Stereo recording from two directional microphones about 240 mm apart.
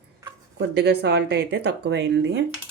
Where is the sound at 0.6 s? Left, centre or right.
Right.